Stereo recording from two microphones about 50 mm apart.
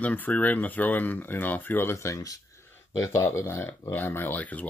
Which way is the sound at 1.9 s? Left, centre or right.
Left.